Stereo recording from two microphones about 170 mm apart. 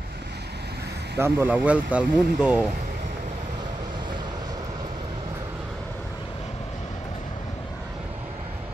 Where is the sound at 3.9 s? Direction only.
25° right (ahead or behind).